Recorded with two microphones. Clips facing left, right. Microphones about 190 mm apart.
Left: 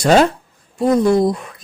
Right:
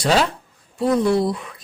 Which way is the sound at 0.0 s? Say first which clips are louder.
Left 6 dB; 45° left (ahead or behind).